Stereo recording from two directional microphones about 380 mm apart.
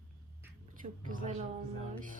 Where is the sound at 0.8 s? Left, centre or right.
Centre.